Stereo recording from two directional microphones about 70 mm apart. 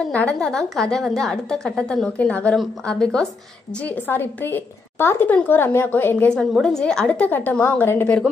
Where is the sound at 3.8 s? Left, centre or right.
Left.